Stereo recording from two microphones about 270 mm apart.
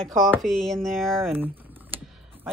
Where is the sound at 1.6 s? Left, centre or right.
Centre.